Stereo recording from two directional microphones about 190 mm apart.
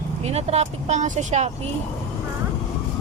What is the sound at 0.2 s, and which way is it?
Speech, 35° right (ahead or behind).